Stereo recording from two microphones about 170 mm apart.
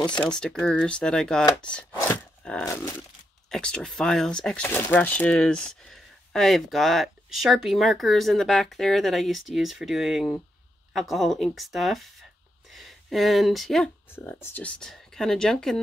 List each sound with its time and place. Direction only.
0.2 s speech: 5° left (ahead or behind)
1.9 s a sound: 10° left (ahead or behind)
2.6 s speech: 15° left (ahead or behind)
3.4 s speech: 5° left (ahead or behind)